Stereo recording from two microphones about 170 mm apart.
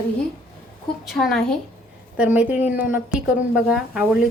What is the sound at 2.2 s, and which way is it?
A woman's voice, 10° right (ahead or behind).